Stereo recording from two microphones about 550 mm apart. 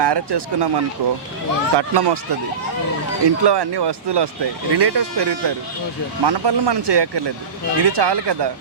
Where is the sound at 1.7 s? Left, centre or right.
Right.